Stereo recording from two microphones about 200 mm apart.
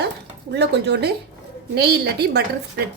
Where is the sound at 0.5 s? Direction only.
55° right (ahead or behind).